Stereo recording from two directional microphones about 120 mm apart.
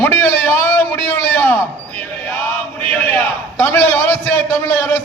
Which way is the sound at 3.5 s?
20° left (ahead or behind).